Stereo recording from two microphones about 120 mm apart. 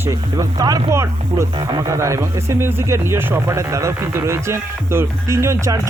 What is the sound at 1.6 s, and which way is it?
Speech, 35° right (ahead or behind).